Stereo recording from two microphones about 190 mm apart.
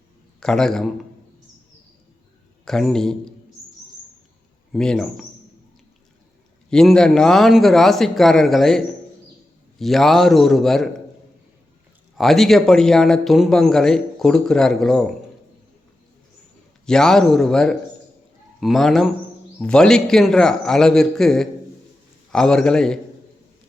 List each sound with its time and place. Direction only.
0.3 s a man's voice: 5° left (ahead or behind)
2.6 s a man's voice: centre (ahead or behind)
4.7 s a man's voice: centre (ahead or behind)
6.7 s a man's voice: 5° left (ahead or behind)
12.1 s a man's voice: centre (ahead or behind)
16.8 s a man's voice: 5° left (ahead or behind)